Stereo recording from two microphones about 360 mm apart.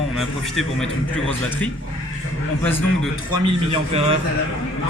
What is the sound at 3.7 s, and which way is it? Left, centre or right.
Speech, centre.